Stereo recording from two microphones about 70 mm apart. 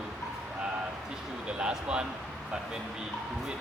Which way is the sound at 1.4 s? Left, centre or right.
Centre.